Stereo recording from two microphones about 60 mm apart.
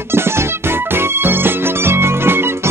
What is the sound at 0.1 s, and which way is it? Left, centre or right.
Music, right.